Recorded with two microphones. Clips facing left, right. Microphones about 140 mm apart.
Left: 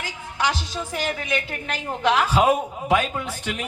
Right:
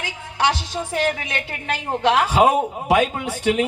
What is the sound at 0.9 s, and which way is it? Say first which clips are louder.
A woman's voice: right 3 dB; 70° right (ahead or behind).